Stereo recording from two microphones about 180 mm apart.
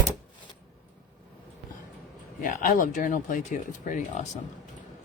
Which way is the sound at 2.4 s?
50° left (ahead or behind).